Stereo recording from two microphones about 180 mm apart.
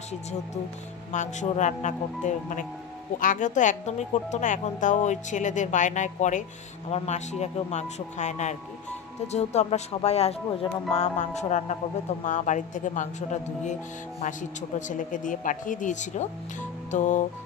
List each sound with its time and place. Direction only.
1.1 s speech: 45° left (ahead or behind)
14.8 s speech: 45° left (ahead or behind)